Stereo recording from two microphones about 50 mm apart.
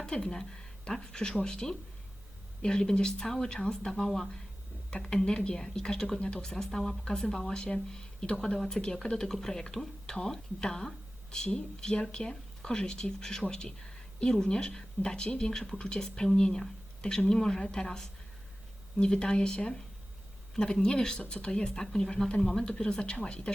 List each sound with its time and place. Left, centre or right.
0.0 s a woman's voice: centre